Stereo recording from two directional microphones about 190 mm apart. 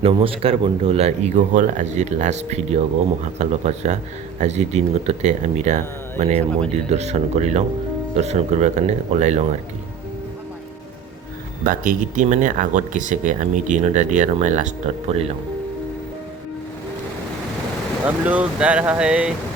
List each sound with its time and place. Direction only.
0.0 s speech: 30° right (ahead or behind)
11.6 s speech: 40° right (ahead or behind)
18.0 s speech: 5° right (ahead or behind)